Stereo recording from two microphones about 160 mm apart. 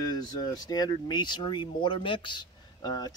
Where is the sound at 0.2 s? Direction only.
25° left (ahead or behind).